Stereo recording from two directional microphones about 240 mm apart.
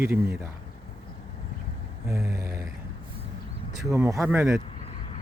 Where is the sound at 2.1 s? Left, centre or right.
Centre.